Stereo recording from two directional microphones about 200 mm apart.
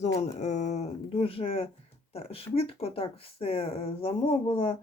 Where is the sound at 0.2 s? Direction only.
35° left (ahead or behind).